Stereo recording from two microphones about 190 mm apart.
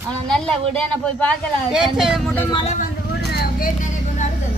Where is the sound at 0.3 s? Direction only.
5° left (ahead or behind).